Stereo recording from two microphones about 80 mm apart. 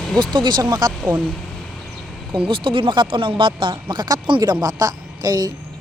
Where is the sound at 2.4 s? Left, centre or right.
Right.